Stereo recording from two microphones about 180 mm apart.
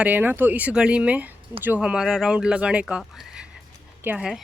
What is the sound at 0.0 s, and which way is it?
Speech, 10° right (ahead or behind).